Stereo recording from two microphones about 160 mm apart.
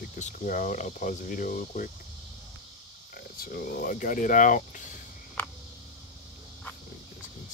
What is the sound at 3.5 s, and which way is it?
Speech, 65° left (ahead or behind).